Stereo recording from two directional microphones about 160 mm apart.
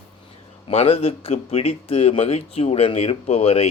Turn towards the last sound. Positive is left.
turn(degrees=40)  # may be behind; listen again after turning